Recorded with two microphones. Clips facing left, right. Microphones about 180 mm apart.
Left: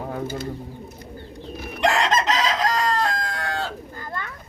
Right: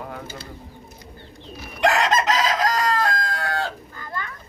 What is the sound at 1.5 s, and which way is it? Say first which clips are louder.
Chicken: left 4 dB; 50° left (ahead or behind).